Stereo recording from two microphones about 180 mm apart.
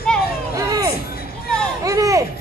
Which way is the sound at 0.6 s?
15° right (ahead or behind).